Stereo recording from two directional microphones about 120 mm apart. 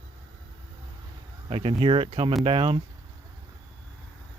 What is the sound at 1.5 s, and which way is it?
Speech, 50° right (ahead or behind).